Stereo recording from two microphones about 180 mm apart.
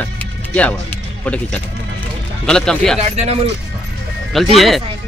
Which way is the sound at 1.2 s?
10° left (ahead or behind).